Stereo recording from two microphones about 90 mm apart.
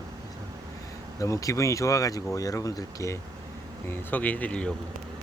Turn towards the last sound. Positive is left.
turn(degrees=10)  # may be behind; listen again after turning